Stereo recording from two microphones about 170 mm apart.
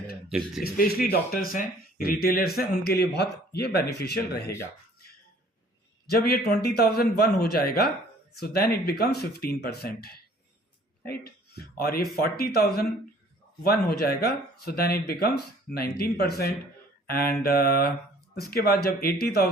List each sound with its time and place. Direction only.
0.3 s a man's voice: centre (ahead or behind)
0.6 s speech: 65° left (ahead or behind)
6.1 s speech: 65° left (ahead or behind)